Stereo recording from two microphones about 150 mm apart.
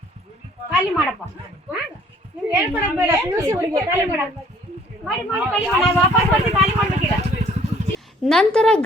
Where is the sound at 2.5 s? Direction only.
15° right (ahead or behind).